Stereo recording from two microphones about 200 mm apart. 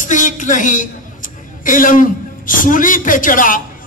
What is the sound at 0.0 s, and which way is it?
A man's voice, 40° left (ahead or behind).